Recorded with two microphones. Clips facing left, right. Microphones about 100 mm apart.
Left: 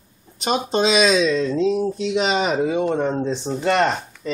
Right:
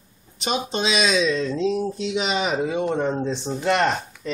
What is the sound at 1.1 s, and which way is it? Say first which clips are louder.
Speech: left 3 dB; centre (ahead or behind).